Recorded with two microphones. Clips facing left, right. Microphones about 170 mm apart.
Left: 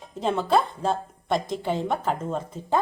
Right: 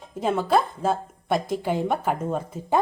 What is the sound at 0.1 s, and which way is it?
A woman's voice, 5° right (ahead or behind).